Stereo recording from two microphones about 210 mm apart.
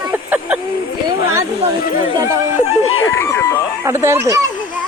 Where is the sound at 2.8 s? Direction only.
85° left.